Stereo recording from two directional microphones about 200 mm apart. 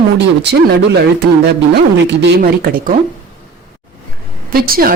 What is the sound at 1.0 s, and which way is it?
Speech, 55° right (ahead or behind).